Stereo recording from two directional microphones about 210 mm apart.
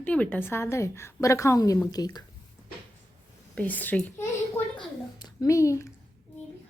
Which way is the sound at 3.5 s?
10° left (ahead or behind).